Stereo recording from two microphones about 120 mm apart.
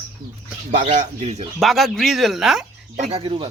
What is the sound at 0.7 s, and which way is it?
Speech, 90° right.